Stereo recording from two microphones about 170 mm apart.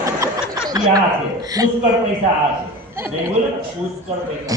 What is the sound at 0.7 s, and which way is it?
A man's voice, 20° right (ahead or behind).